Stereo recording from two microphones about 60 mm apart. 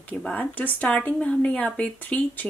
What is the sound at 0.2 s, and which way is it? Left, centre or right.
Speech, left.